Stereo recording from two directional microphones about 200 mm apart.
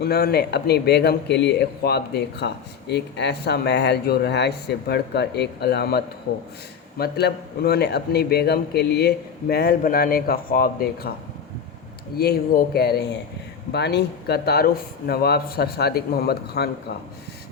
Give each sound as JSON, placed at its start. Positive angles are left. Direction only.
{"t": 0.0, "sound": "speech", "side_deg": 50}
{"t": 7.0, "sound": "a man's voice", "side_deg": 55}
{"t": 12.1, "sound": "a man's voice", "side_deg": 50}